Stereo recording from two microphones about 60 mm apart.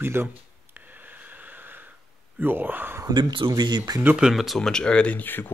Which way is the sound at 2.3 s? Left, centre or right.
Right.